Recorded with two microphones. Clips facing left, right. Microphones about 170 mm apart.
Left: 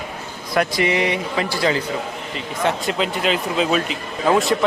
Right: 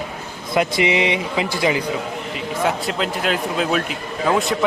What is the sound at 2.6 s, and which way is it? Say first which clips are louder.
Speech: left 1 dB; centre (ahead or behind).